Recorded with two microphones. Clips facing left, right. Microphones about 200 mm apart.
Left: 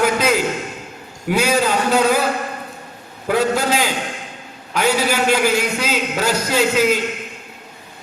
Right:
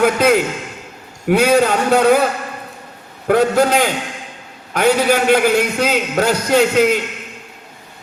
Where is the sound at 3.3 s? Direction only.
60° right (ahead or behind).